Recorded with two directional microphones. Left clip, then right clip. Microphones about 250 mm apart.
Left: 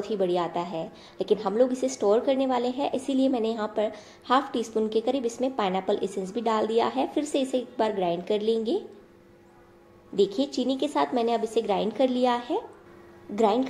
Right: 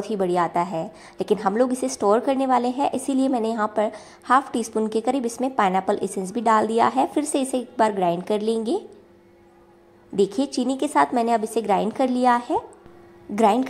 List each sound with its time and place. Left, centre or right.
0.0 s a woman's voice: right
10.3 s a woman's voice: right